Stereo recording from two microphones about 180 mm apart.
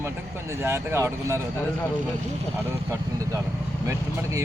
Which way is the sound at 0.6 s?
15° right (ahead or behind).